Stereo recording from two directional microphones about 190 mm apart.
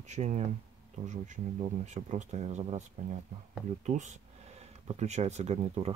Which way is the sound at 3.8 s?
40° right (ahead or behind).